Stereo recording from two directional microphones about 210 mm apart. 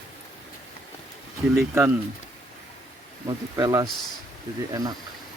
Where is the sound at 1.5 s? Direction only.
10° right (ahead or behind).